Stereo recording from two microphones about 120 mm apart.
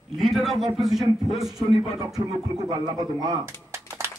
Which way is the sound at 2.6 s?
30° right (ahead or behind).